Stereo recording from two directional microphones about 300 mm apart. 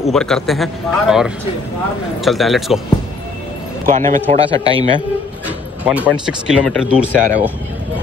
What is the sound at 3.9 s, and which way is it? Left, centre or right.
Speech, right.